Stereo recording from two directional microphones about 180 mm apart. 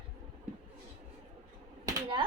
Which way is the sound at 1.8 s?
25° right (ahead or behind).